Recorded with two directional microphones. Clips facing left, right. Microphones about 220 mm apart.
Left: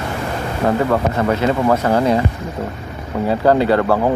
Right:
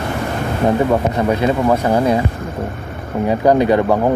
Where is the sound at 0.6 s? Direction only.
15° right (ahead or behind).